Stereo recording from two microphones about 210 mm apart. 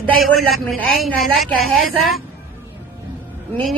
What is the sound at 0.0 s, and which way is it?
A man's voice, 5° left (ahead or behind).